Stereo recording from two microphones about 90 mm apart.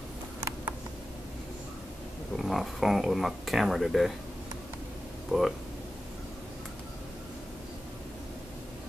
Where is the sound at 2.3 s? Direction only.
Centre (ahead or behind).